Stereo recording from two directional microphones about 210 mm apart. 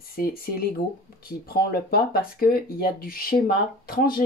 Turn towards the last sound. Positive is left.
turn(degrees=45)  # may be behind; listen again after turning